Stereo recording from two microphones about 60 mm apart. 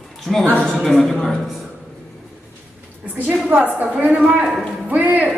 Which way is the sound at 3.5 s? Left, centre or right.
Right.